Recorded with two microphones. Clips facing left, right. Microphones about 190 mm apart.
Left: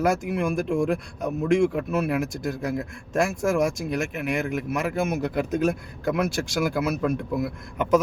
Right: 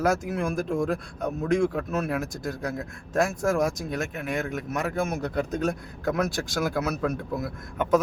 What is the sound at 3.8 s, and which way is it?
Speech, 70° left (ahead or behind).